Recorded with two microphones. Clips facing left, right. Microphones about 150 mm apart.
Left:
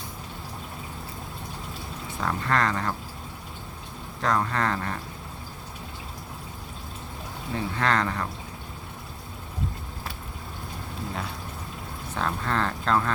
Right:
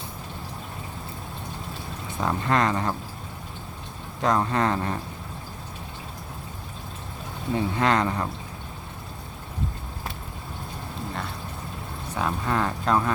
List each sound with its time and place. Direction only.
2.2 s speech: 20° right (ahead or behind)
4.2 s speech: 20° right (ahead or behind)
7.5 s speech: 20° right (ahead or behind)
12.1 s speech: 10° right (ahead or behind)